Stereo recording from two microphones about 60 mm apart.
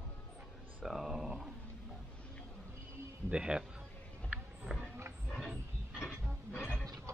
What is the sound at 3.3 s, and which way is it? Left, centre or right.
Speech, centre.